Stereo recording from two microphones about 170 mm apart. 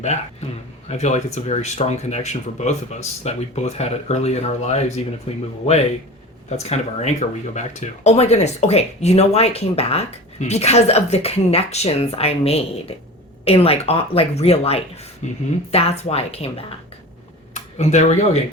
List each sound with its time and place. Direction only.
0.9 s speech: 40° left (ahead or behind)
6.6 s speech: 40° left (ahead or behind)
17.5 s a sound: 45° left (ahead or behind)